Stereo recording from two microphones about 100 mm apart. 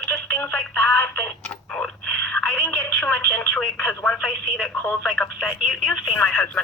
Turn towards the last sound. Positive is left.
turn(degrees=5)  # may be behind; listen again after turning